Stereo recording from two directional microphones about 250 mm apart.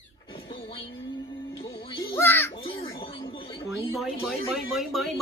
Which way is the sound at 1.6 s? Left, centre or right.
Centre.